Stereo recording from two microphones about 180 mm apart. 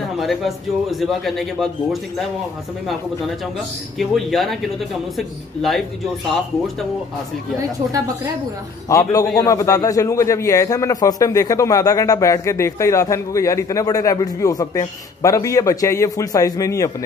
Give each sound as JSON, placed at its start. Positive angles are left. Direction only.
{"t": 0.2, "sound": "a man's voice", "side_deg": 0}
{"t": 4.0, "sound": "a man's voice", "side_deg": 0}
{"t": 8.8, "sound": "a man's voice", "side_deg": 20}